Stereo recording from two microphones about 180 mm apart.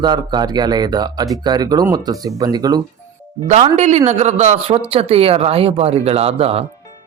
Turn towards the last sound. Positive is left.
turn(degrees=-35)  # may be behind; listen again after turning